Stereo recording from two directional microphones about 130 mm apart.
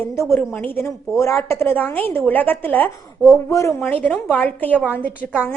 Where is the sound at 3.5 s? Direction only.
25° left (ahead or behind).